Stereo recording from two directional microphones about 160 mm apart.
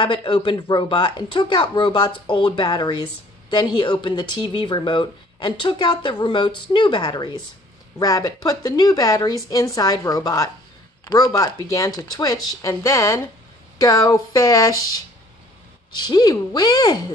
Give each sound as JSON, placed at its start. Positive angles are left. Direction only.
{"t": 0.0, "sound": "speech", "side_deg": 30}
{"t": 15.9, "sound": "speech", "side_deg": 25}